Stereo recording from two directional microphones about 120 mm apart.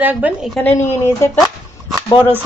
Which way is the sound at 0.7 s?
20° left (ahead or behind).